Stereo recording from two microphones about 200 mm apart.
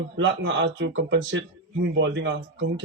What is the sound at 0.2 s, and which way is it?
A man's voice, 65° right (ahead or behind).